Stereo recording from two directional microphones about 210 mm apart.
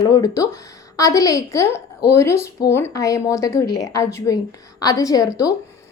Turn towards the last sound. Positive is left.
turn(degrees=15)  # may be behind; listen again after turning